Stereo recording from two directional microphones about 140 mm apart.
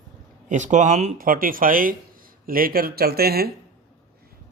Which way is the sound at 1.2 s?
90° right.